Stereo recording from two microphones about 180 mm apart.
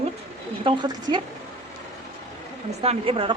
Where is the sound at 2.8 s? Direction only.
30° right (ahead or behind).